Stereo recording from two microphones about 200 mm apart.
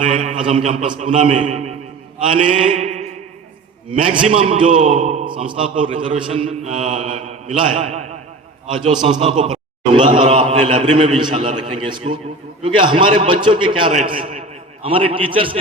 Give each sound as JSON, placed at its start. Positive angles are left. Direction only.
{"t": 0.3, "sound": "chant", "side_deg": -25}
{"t": 1.4, "sound": "a man's voice", "side_deg": -35}
{"t": 2.3, "sound": "chant", "side_deg": -25}